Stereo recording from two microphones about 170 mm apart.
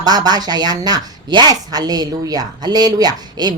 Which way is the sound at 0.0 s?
25° right (ahead or behind).